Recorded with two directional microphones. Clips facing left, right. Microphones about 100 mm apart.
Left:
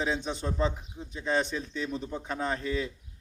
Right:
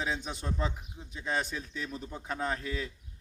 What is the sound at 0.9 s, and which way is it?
Speech, centre (ahead or behind).